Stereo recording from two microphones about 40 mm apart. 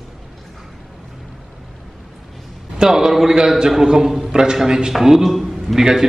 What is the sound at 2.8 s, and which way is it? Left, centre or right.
A man's voice, centre.